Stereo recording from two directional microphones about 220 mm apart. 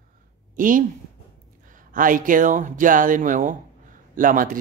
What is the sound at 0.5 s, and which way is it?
Speech, 40° right (ahead or behind).